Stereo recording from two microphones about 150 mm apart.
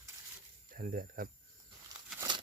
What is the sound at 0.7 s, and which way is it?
Speech, 65° right (ahead or behind).